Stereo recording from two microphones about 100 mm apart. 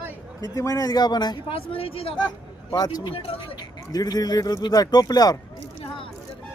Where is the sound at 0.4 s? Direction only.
35° left (ahead or behind).